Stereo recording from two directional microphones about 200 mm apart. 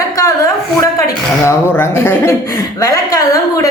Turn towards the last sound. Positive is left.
turn(degrees=15)  # may be behind; listen again after turning